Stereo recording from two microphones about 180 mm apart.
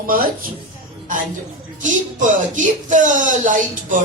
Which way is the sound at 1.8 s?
45° right (ahead or behind).